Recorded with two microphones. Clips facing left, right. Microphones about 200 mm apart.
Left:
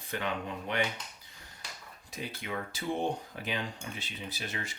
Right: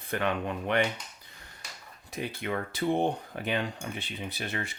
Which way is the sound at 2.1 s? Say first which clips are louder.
Right 5 dB; 60° right (ahead or behind).